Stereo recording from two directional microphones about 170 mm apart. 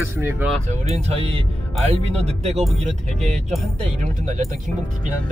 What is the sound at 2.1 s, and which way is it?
Speech, 40° right (ahead or behind).